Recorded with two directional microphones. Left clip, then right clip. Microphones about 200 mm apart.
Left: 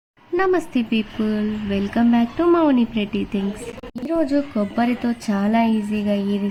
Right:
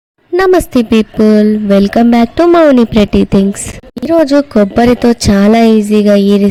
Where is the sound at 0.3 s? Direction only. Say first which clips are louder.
Right 11 dB; 40° right (ahead or behind).